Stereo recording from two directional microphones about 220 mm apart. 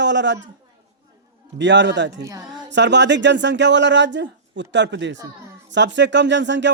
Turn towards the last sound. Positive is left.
turn(degrees=-55)  # may be behind; listen again after turning